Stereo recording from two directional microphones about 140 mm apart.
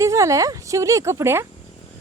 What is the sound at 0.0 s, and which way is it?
A woman's voice, 20° right (ahead or behind).